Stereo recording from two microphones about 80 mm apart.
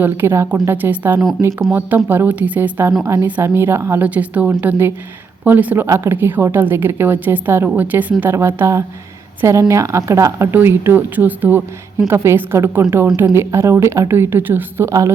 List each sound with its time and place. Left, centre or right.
0.0 s a woman's voice: right
4.0 s a woman's voice: centre
5.8 s a woman's voice: right